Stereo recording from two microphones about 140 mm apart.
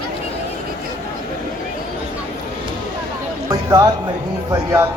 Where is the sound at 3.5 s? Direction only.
25° right (ahead or behind).